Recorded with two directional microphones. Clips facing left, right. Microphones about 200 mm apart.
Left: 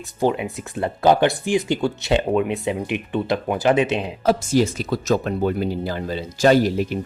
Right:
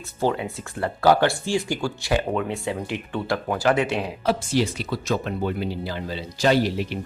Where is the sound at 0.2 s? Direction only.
15° left (ahead or behind).